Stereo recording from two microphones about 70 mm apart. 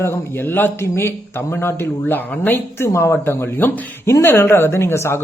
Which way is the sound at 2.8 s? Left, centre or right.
Left.